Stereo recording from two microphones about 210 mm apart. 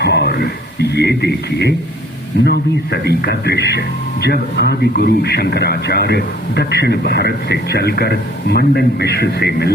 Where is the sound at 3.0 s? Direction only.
50° left (ahead or behind).